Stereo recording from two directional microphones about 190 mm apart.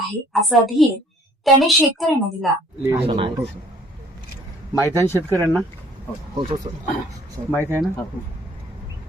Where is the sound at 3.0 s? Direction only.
30° right (ahead or behind).